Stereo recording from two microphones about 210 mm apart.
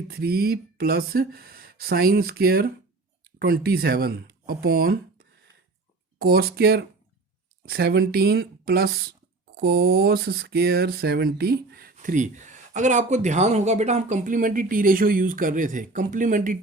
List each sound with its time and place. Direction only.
0.1 s speech: 45° right (ahead or behind)
6.1 s speech: 50° right (ahead or behind)